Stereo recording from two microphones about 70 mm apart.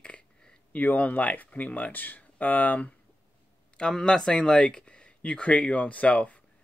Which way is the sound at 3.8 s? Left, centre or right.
Centre.